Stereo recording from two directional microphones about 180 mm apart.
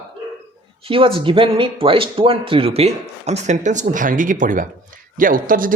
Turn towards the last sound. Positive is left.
turn(degrees=-50)  # may be behind; listen again after turning